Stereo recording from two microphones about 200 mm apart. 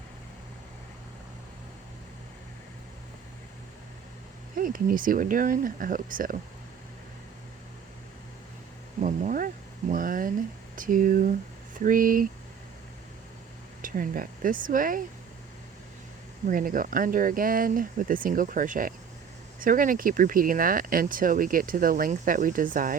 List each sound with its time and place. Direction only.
4.5 s speech: 45° right (ahead or behind)
9.0 s speech: 35° right (ahead or behind)
13.8 s speech: 45° right (ahead or behind)
16.5 s speech: 45° right (ahead or behind)